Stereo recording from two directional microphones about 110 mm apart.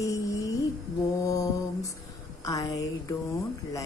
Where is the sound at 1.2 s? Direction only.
30° left (ahead or behind).